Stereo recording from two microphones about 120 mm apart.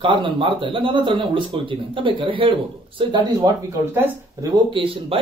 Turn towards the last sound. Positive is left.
turn(degrees=-45)  # may be behind; listen again after turning